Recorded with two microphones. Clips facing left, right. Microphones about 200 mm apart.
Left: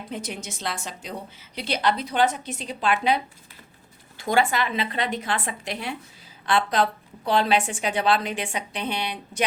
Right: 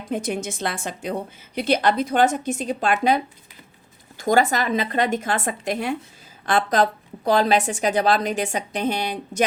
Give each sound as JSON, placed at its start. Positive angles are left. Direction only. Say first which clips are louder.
{"t": 0.1, "sound": "a woman's voice", "louder": "right 10 dB", "side_deg": -50}
{"t": 4.2, "sound": "a woman's voice", "louder": "right 3 dB", "side_deg": -40}